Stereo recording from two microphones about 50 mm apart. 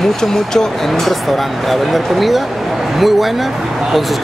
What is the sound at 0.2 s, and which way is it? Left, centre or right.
Speech, centre.